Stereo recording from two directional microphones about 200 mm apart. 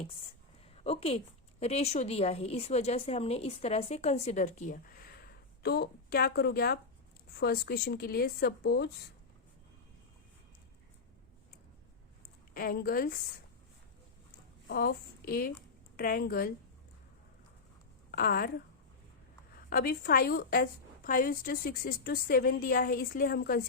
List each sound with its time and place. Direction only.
0.9 s a woman's voice: 30° left (ahead or behind); by 8.9 s 50° left (ahead or behind)
12.5 s a woman's voice: 50° left (ahead or behind)
14.7 s a woman's voice: 50° left (ahead or behind)
18.1 s a woman's voice: 50° left (ahead or behind)
19.7 s a woman's voice: 50° left (ahead or behind)